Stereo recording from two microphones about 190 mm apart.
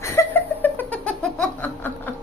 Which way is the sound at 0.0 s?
10° left (ahead or behind).